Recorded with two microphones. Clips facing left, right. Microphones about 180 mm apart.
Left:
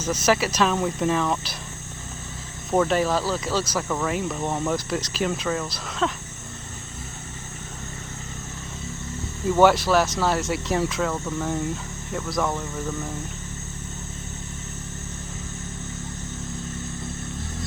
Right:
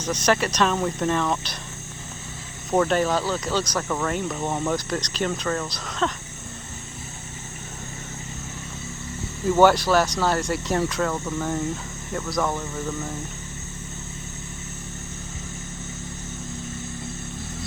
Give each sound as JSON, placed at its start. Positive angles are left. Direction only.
{"t": 0.0, "sound": "speech", "side_deg": 5}
{"t": 2.6, "sound": "speech", "side_deg": 0}
{"t": 9.6, "sound": "speech", "side_deg": 0}